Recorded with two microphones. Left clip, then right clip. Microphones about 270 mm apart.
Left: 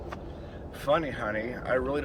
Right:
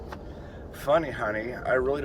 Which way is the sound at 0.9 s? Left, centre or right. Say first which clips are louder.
Right 3 dB; centre.